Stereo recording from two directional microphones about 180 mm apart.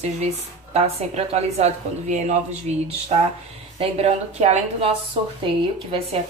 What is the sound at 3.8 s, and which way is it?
Speech, 35° right (ahead or behind).